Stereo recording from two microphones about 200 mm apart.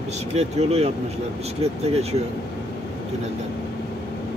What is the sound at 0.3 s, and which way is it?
Speech, 30° right (ahead or behind).